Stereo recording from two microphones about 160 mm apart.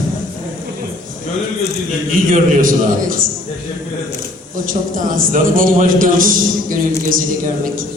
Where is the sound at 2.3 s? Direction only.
60° right (ahead or behind).